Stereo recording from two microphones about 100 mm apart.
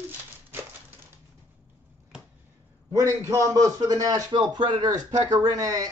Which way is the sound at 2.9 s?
30° right (ahead or behind).